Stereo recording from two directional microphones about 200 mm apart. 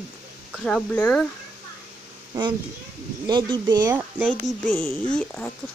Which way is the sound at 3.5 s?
20° right (ahead or behind).